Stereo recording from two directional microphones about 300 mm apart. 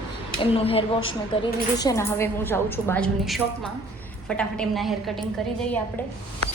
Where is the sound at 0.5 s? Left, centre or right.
Centre.